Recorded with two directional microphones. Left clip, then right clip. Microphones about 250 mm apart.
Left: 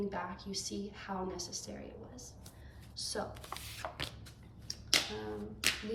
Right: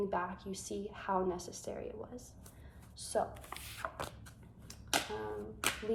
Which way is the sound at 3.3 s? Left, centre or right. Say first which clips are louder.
Left 2 dB; centre.